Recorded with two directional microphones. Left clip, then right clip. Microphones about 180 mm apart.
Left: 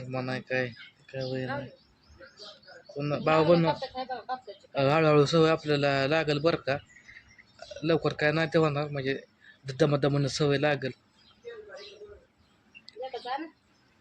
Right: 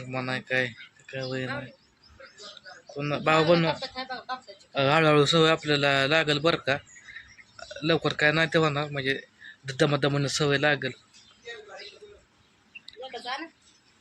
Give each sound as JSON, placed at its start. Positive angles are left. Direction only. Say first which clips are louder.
{"t": 0.0, "sound": "a man's voice", "louder": "right 3 dB", "side_deg": 5}
{"t": 3.0, "sound": "a man's voice", "louder": "right 2 dB", "side_deg": 0}
{"t": 3.8, "sound": "speech", "louder": "even", "side_deg": 30}
{"t": 4.7, "sound": "a man's voice", "louder": "right 2 dB", "side_deg": 5}
{"t": 13.0, "sound": "a sound", "louder": "even", "side_deg": 35}